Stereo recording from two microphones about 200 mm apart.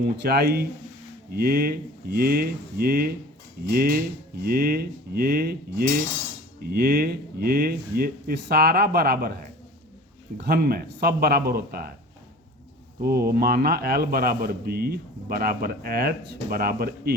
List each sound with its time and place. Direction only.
0.2 s a man's voice: 50° right (ahead or behind)
13.0 s a man's voice: 50° right (ahead or behind)